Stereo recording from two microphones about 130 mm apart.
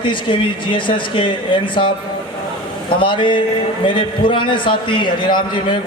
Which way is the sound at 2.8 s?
40° left (ahead or behind).